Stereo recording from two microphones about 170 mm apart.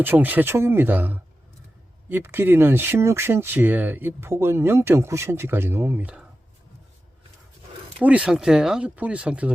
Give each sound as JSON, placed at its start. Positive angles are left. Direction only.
{"t": 0.0, "sound": "speech", "side_deg": -10}
{"t": 7.9, "sound": "speech", "side_deg": -5}